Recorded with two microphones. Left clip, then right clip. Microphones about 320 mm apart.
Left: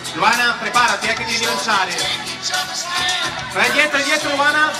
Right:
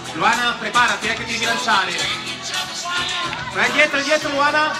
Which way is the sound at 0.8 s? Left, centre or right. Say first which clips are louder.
Left 3 dB; centre.